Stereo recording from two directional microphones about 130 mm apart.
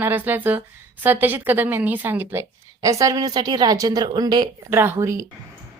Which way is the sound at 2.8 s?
25° right (ahead or behind).